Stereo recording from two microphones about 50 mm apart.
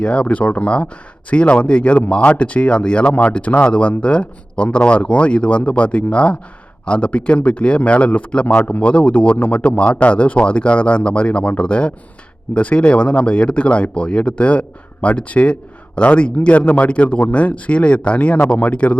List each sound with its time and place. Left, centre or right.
0.0 s speech: left